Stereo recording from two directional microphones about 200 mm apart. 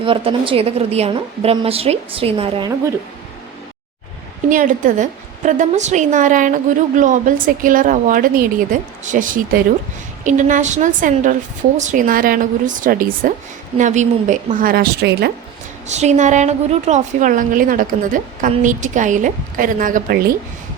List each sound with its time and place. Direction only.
0.0 s a woman's voice: 25° right (ahead or behind)
4.4 s a woman's voice: 40° right (ahead or behind)
15.9 s a woman's voice: 35° right (ahead or behind)